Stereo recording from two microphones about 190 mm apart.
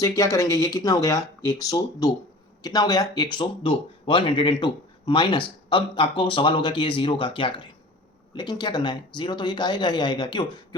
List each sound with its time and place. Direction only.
0.0 s speech: 15° left (ahead or behind)